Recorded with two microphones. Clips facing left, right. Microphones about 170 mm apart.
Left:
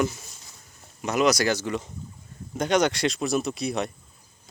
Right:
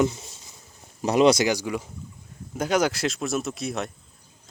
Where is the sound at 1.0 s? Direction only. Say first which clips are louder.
Right 4 dB; 30° right (ahead or behind).